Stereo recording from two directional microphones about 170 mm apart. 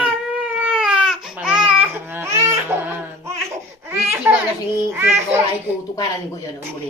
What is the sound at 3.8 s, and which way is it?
Laughter, 15° right (ahead or behind).